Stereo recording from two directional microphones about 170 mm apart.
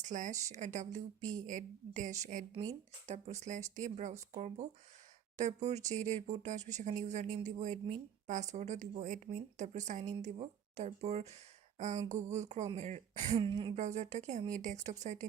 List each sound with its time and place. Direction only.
0.0 s speech: 45° right (ahead or behind); by 13.7 s 30° right (ahead or behind)
13.7 s speech: 45° right (ahead or behind)